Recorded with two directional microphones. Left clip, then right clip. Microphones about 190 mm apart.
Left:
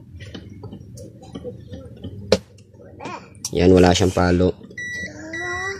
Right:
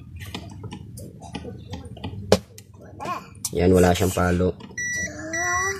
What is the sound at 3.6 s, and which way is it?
Speech, 30° left (ahead or behind).